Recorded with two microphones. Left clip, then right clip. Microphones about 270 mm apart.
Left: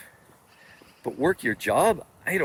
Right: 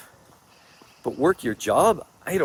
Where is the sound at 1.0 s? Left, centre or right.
Centre.